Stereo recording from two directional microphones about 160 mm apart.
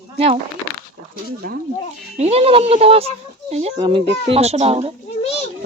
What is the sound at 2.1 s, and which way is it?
A child's voice, 40° right (ahead or behind).